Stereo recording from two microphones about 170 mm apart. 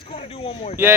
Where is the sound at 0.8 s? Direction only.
15° right (ahead or behind).